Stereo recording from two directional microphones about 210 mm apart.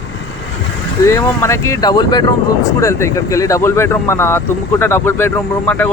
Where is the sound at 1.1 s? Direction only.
15° left (ahead or behind).